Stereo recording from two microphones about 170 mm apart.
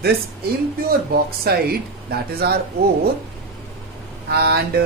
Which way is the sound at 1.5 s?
65° right (ahead or behind).